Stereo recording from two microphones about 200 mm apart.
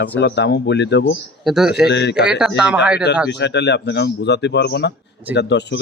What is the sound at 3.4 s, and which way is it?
Speech, 60° left (ahead or behind).